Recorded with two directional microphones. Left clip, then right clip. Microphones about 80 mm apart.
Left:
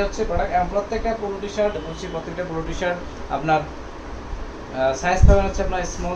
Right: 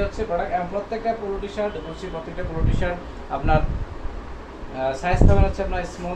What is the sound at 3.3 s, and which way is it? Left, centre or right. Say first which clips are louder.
Speech: left 2 dB; left.